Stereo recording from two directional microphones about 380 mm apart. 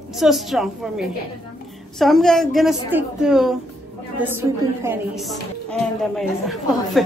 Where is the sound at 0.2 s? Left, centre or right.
Centre.